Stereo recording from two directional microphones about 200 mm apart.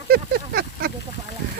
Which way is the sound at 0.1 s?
50° right (ahead or behind).